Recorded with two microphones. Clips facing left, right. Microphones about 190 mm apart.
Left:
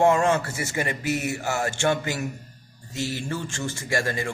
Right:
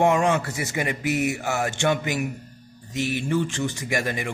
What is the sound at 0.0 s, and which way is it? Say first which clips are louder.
Speech: even; 15° right (ahead or behind).